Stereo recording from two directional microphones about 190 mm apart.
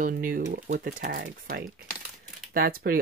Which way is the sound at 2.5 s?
50° right (ahead or behind).